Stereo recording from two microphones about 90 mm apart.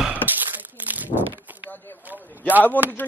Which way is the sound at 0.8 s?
20° right (ahead or behind).